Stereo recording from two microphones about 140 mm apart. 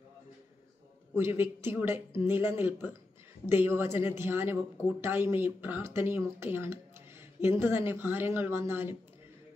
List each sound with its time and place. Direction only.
1.1 s a woman's voice: 15° right (ahead or behind)